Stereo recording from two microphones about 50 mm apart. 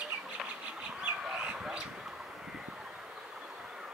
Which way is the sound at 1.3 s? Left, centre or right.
Centre.